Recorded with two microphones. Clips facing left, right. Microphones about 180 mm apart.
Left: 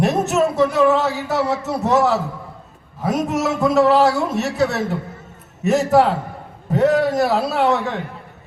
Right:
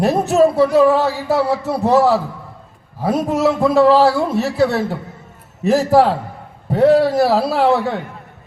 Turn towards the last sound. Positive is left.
turn(degrees=-30)  # may be behind; listen again after turning